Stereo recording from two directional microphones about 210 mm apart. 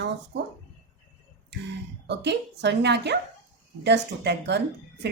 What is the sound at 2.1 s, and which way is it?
A woman's voice, 55° right (ahead or behind).